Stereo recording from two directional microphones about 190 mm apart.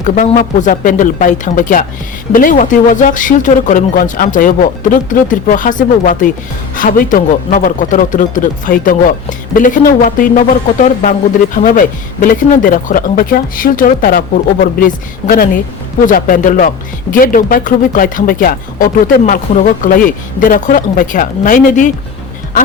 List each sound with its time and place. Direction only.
0.3 s speech: 45° left (ahead or behind)
15.2 s a woman's voice: 35° left (ahead or behind)
16.0 s speech: 45° left (ahead or behind)